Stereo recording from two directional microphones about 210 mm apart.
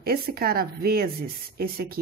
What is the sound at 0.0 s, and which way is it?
A woman's voice, 45° right (ahead or behind).